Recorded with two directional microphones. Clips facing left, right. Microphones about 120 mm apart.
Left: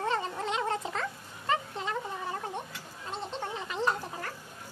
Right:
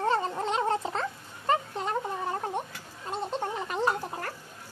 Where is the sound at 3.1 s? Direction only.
45° right (ahead or behind).